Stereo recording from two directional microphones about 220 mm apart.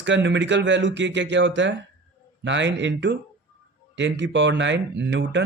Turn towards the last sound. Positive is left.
turn(degrees=-55)  # may be behind; listen again after turning